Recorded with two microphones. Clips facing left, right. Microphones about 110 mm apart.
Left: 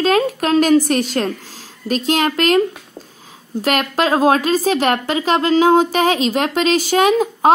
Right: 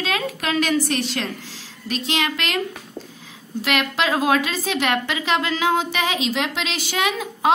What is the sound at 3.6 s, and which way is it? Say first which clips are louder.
A woman's voice: left 5 dB; 45° left (ahead or behind).